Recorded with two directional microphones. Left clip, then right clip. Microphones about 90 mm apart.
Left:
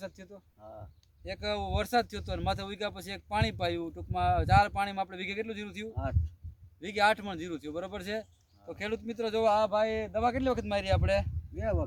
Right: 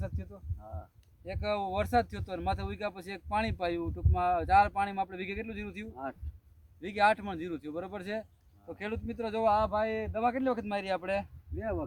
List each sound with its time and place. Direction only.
0.0 s speech: 5° left (ahead or behind)
1.2 s speech: centre (ahead or behind)
5.9 s speech: 40° left (ahead or behind)
6.7 s speech: 10° left (ahead or behind)
11.5 s speech: 30° left (ahead or behind)